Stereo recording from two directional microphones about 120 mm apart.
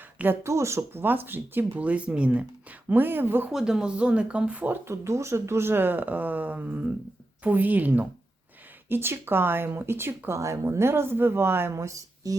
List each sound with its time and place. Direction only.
0.2 s speech: 20° right (ahead or behind)
3.5 s speech: 5° right (ahead or behind); by 12.4 s 30° right (ahead or behind)